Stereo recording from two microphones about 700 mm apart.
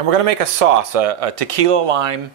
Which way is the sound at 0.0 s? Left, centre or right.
Right.